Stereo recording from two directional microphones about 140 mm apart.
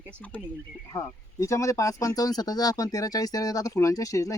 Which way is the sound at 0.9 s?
20° left (ahead or behind).